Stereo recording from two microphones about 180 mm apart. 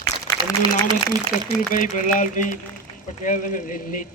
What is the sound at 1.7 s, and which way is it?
Speech, 50° left (ahead or behind).